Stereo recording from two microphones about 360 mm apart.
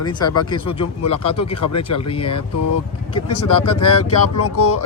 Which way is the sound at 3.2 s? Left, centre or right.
Left.